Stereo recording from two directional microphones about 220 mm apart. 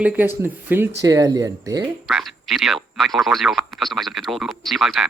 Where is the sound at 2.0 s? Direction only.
Centre (ahead or behind).